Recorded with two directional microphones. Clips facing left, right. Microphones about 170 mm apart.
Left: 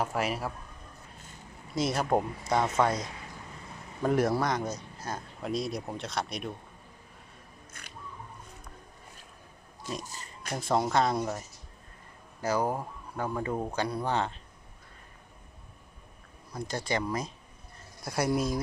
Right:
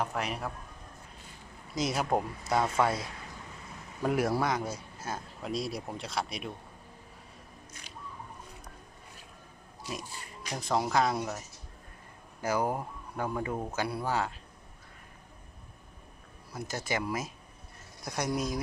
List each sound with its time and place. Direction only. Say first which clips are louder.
0.0 s speech: left 3 dB; 5° left (ahead or behind)
1.7 s speech: left 2 dB; centre (ahead or behind)
4.0 s speech: left 2 dB; 5° right (ahead or behind)
7.7 s a sound: even; 55° left (ahead or behind)
10.0 s a sound: even; 45° left (ahead or behind)
10.5 s speech: left 2 dB; centre (ahead or behind)
12.4 s speech: left 1 dB; 10° right (ahead or behind)
16.5 s speech: left 2 dB; 5° right (ahead or behind)